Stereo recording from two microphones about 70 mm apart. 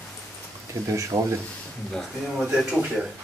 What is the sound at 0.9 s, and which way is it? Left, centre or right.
Speech, right.